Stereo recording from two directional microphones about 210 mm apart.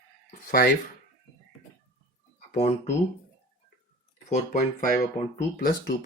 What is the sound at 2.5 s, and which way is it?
Speech, 30° left (ahead or behind).